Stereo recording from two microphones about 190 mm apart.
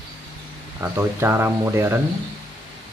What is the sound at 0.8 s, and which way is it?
Speech, 15° right (ahead or behind).